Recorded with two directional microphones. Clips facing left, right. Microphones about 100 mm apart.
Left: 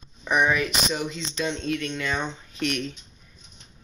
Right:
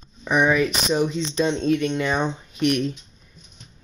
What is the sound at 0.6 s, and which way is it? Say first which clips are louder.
Speech: right 6 dB; 30° right (ahead or behind).